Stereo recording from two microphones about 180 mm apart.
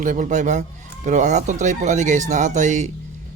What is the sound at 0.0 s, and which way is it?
Speech, 45° right (ahead or behind).